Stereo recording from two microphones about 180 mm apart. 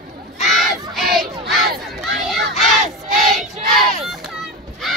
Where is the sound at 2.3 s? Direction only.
Centre (ahead or behind).